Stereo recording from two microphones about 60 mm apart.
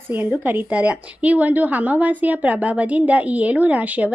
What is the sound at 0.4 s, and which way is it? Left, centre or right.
A woman's voice, right.